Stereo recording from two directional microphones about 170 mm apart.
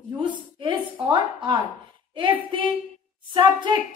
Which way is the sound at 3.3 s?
30° right (ahead or behind).